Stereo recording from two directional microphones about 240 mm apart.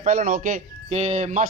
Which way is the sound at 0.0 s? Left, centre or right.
Right.